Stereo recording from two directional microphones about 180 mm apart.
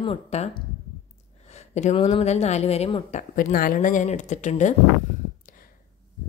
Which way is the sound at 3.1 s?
50° left (ahead or behind).